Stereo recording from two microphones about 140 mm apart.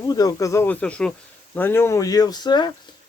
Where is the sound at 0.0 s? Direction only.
25° left (ahead or behind).